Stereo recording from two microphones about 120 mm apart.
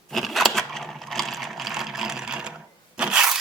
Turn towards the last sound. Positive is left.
turn(degrees=-5)  # may be behind; listen again after turning